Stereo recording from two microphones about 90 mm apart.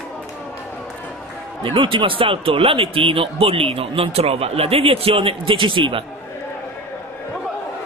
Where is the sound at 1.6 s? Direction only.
70° right (ahead or behind).